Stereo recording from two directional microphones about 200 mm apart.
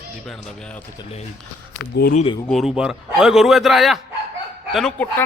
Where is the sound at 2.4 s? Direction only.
Centre (ahead or behind).